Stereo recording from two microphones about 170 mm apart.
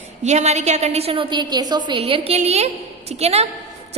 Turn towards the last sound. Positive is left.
turn(degrees=-40)  # may be behind; listen again after turning